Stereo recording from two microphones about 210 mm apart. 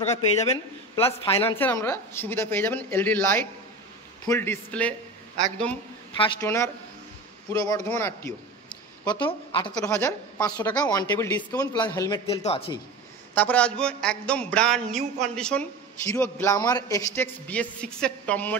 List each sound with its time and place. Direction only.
0.0 s speech: 30° left (ahead or behind)
1.6 s a man's voice: 10° left (ahead or behind)
4.3 s a man's voice: 10° left (ahead or behind)
6.4 s a man's voice: 15° left (ahead or behind)
9.0 s a man's voice: 20° left (ahead or behind)
12.3 s speech: 30° left (ahead or behind)
13.3 s a man's voice: 5° left (ahead or behind)